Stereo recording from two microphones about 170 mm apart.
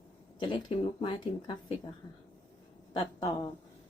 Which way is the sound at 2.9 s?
30° left (ahead or behind).